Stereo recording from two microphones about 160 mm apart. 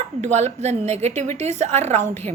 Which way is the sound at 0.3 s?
45° right (ahead or behind).